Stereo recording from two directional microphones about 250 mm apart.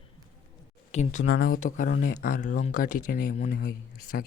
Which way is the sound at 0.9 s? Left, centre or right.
Left.